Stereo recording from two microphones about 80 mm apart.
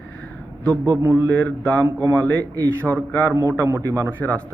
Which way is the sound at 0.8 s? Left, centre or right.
Right.